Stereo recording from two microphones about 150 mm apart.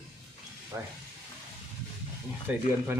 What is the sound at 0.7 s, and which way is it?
Speech, 20° right (ahead or behind).